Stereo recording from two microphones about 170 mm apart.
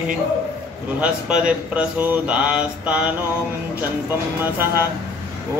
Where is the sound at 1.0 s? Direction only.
5° right (ahead or behind).